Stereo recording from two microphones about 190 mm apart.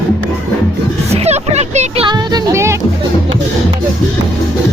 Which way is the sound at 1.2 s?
35° right (ahead or behind).